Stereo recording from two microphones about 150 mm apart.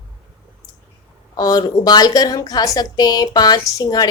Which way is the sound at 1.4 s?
25° left (ahead or behind).